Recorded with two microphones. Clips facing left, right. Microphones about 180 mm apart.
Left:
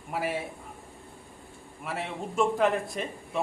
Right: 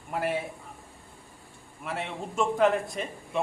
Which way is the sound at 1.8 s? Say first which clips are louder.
Even; centre (ahead or behind).